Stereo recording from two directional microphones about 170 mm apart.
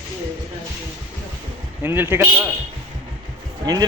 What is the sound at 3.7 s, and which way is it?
Speech, 25° right (ahead or behind).